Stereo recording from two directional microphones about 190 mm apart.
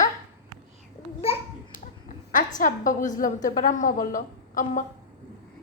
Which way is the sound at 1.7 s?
45° left (ahead or behind).